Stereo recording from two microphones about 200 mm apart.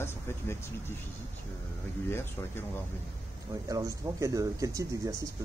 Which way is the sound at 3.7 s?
15° right (ahead or behind).